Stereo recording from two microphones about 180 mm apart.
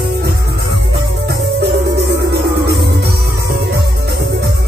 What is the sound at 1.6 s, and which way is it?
Music, 65° right (ahead or behind).